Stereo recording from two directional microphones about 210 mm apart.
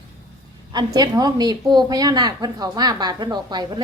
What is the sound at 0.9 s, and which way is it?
Speech, 20° right (ahead or behind).